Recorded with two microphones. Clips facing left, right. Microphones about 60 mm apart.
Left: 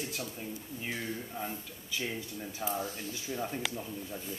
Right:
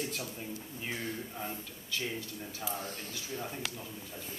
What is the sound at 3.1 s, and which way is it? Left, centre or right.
Speech, left.